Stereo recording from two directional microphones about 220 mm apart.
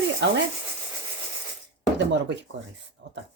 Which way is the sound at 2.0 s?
55° right (ahead or behind).